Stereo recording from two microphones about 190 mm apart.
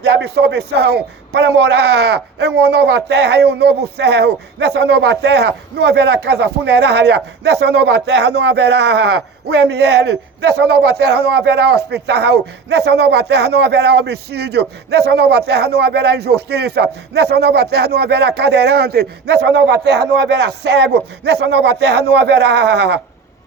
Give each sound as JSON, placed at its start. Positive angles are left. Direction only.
{"t": 0.0, "sound": "speech", "side_deg": -60}